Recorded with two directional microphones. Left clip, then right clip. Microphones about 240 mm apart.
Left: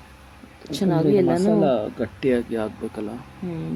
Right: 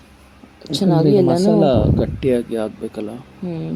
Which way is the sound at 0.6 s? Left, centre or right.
Centre.